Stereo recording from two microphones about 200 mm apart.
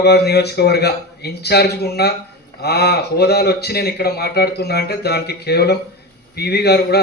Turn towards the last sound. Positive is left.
turn(degrees=55)  # may be behind; listen again after turning